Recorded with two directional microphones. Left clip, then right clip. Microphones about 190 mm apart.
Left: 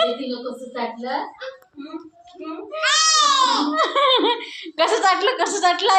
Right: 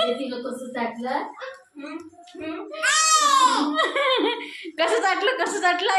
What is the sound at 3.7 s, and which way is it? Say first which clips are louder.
Speech: left 4 dB; 25° left (ahead or behind).